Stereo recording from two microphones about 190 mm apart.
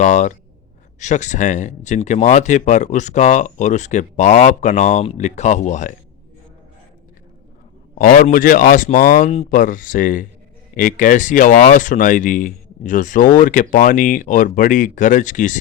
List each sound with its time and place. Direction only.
0.0 s speech: 40° left (ahead or behind)
7.9 s speech: 45° left (ahead or behind)